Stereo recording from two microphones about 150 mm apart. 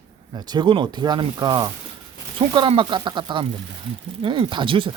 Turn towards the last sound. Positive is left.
turn(degrees=-35)  # may be behind; listen again after turning